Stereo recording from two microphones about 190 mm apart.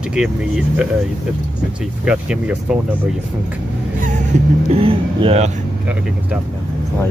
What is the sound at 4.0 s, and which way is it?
Speech, 40° right (ahead or behind).